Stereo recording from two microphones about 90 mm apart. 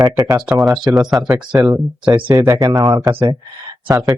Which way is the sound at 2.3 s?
40° right (ahead or behind).